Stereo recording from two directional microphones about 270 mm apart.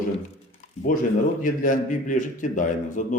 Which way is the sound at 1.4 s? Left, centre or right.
Left.